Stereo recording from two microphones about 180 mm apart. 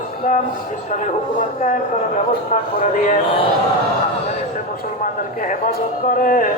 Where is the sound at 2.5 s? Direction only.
45° left (ahead or behind).